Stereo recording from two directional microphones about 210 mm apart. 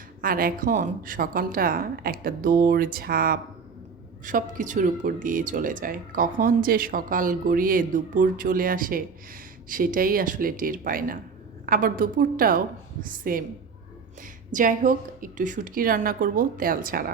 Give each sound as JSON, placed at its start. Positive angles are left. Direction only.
{"t": 0.2, "sound": "a woman's voice", "side_deg": -40}
{"t": 14.5, "sound": "speech", "side_deg": -40}